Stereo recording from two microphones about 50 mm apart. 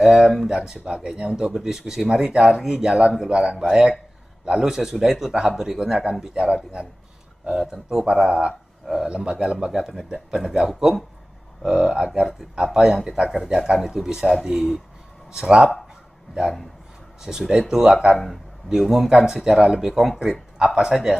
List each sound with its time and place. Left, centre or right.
0.0 s speech: centre
17.2 s speech: centre